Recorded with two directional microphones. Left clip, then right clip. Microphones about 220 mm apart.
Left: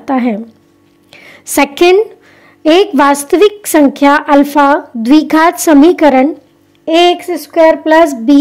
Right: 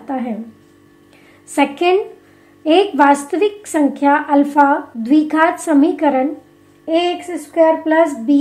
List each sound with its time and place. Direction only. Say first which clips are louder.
0.0 s speech: left 9 dB; 50° left (ahead or behind)
1.1 s a sound: left 6 dB; 45° left (ahead or behind)
2.6 s a woman's voice: left 4 dB; 45° left (ahead or behind)